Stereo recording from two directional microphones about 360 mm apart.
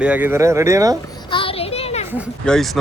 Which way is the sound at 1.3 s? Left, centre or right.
Centre.